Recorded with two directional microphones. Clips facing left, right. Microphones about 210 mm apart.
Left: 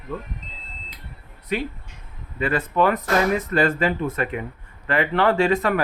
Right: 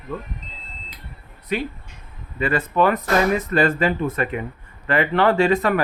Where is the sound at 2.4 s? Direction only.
Centre (ahead or behind).